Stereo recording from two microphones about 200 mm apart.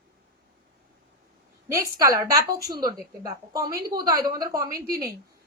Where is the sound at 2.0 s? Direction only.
15° right (ahead or behind).